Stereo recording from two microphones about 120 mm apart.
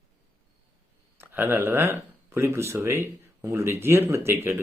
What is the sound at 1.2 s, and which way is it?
Speech, 20° right (ahead or behind).